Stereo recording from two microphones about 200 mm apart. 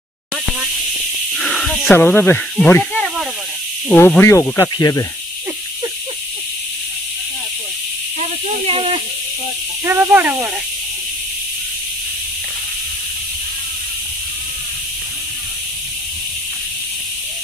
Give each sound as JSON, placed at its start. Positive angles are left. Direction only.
{"t": 1.4, "sound": "snake", "side_deg": 0}
{"t": 3.9, "sound": "speech", "side_deg": 10}
{"t": 8.2, "sound": "speech", "side_deg": -30}
{"t": 9.8, "sound": "speech", "side_deg": -10}